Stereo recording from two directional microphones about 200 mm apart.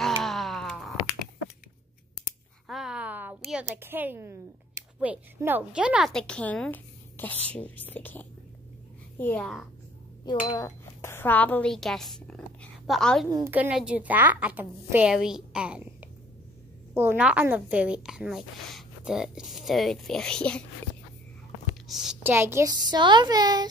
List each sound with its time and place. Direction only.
0.0 s wail: centre (ahead or behind)
2.7 s a woman's voice: 5° right (ahead or behind)
10.2 s a woman's voice: 20° left (ahead or behind); by 13.3 s centre (ahead or behind)
13.3 s a woman's voice: 10° right (ahead or behind); by 20.6 s 5° left (ahead or behind)
21.8 s a woman's voice: centre (ahead or behind); by 23.7 s 20° right (ahead or behind)